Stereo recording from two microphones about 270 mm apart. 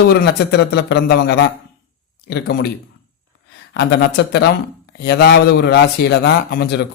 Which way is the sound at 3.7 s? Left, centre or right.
Left.